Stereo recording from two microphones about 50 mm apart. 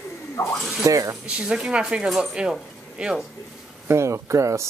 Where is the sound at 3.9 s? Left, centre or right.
Right.